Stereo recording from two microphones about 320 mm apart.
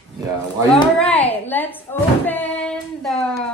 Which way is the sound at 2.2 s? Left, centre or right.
Centre.